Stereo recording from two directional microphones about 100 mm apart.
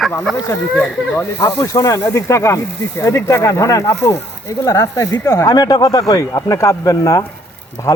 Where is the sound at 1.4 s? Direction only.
30° left (ahead or behind).